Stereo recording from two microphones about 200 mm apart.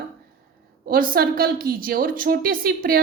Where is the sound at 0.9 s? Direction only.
45° right (ahead or behind).